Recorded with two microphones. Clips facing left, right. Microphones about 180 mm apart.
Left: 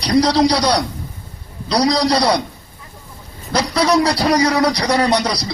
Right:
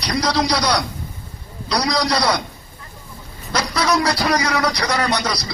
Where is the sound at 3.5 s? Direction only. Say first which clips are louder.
Left 4 dB; 35° left (ahead or behind).